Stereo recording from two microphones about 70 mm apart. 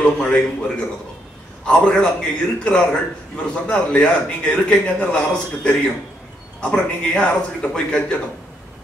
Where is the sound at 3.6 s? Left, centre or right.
Centre.